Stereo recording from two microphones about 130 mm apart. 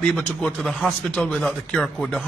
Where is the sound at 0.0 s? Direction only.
5° left (ahead or behind).